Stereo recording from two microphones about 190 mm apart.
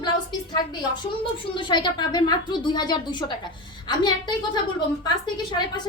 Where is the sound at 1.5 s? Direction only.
25° left (ahead or behind).